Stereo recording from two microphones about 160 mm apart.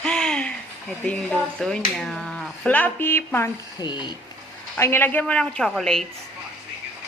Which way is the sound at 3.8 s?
30° left (ahead or behind).